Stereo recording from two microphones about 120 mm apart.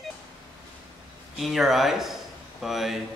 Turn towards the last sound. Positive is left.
turn(degrees=0)  # may be behind; listen again after turning